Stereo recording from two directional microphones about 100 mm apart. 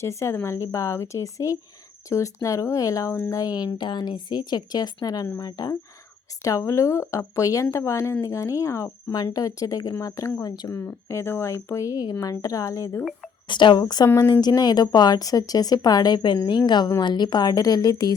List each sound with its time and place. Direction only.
0.0 s a woman's voice: 30° left (ahead or behind)
10.5 s a woman's voice: 40° left (ahead or behind)
10.8 s speech: 25° left (ahead or behind)
13.5 s a woman's voice: 50° left (ahead or behind)